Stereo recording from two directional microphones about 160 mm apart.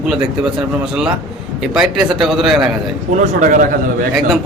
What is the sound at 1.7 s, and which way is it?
Speech, 5° right (ahead or behind).